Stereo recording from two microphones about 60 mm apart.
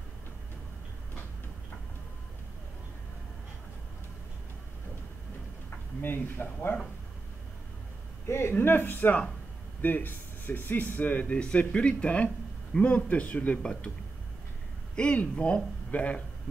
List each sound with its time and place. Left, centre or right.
5.9 s a man's voice: left
8.3 s a man's voice: left; by 13.8 s centre
15.0 s speech: centre